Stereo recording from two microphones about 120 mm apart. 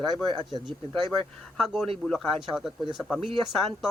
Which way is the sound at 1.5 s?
Centre (ahead or behind).